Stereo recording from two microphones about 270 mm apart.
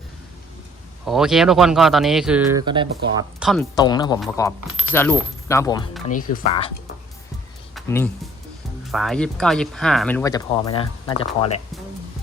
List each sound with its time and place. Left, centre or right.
1.0 s speech: centre
3.4 s speech: centre
3.8 s speech: centre
7.8 s speech: centre; by 11.6 s left